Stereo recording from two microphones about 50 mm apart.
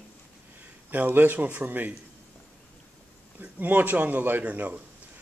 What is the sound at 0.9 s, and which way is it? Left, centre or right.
A man's voice, right.